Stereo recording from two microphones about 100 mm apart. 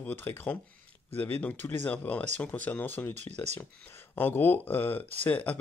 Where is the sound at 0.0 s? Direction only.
25° left (ahead or behind).